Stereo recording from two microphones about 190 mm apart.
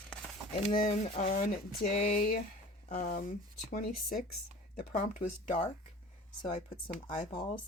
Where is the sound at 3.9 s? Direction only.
55° left (ahead or behind).